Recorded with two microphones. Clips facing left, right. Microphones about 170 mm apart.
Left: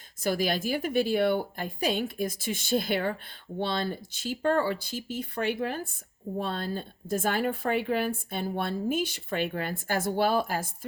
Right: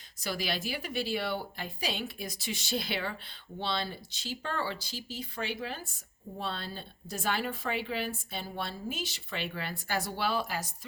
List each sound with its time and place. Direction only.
0.2 s speech: 50° left (ahead or behind)